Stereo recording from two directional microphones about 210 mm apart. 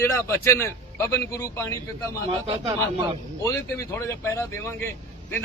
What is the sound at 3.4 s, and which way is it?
A man's voice, 15° left (ahead or behind).